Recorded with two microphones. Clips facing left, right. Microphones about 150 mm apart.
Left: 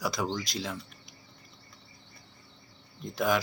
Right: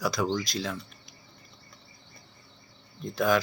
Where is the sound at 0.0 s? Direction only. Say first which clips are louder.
Right 4 dB; 20° left (ahead or behind).